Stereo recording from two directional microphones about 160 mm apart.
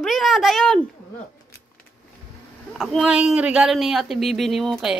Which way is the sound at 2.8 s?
Centre (ahead or behind).